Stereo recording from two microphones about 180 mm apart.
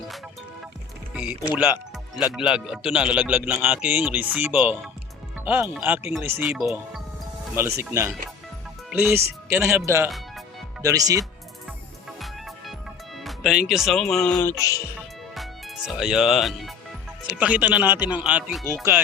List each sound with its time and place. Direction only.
1.1 s speech: 5° right (ahead or behind)
1.7 s music: 20° left (ahead or behind)
2.3 s speech: 5° right (ahead or behind)
12.2 s music: centre (ahead or behind)
13.1 s speech: centre (ahead or behind)
14.3 s music: 20° left (ahead or behind)
15.4 s speech: centre (ahead or behind)